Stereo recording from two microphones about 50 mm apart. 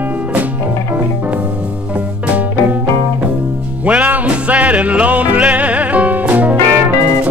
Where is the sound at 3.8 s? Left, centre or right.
Right.